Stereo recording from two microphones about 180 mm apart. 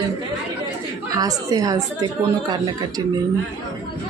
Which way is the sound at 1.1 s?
20° right (ahead or behind).